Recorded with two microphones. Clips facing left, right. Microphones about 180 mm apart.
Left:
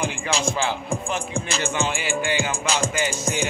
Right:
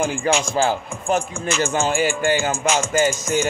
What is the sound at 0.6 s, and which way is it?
Music, 40° right (ahead or behind).